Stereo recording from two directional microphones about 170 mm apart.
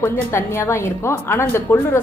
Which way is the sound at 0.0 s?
15° left (ahead or behind).